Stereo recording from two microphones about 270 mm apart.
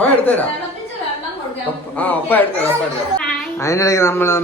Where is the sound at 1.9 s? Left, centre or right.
Centre.